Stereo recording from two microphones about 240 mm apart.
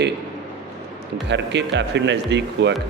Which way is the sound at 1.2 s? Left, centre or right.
Right.